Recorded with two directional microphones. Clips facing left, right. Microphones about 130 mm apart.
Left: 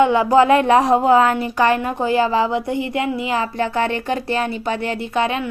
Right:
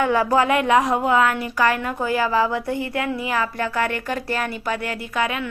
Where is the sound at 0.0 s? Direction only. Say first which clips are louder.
Left 5 dB; 25° left (ahead or behind).